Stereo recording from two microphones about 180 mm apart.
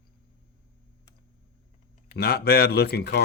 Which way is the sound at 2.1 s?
60° left (ahead or behind).